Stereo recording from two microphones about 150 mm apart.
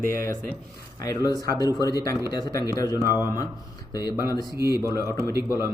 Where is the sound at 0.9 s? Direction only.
25° left (ahead or behind).